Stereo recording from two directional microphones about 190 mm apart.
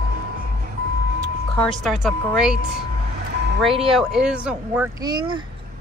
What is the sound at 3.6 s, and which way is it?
A woman's voice, centre (ahead or behind).